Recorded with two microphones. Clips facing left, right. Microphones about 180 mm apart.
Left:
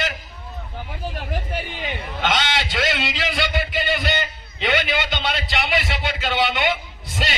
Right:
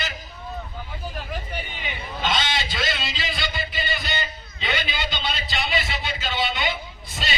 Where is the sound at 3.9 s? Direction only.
60° left (ahead or behind).